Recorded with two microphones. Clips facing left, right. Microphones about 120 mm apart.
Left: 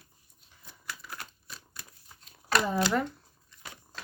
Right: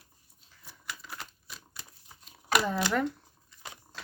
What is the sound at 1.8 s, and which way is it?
Crumpling, 15° right (ahead or behind).